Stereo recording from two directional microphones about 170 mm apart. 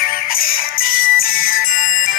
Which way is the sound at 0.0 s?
60° left (ahead or behind).